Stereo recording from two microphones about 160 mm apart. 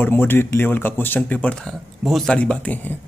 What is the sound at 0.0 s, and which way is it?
Speech, 15° left (ahead or behind).